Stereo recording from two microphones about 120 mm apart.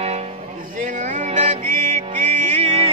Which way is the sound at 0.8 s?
90° right.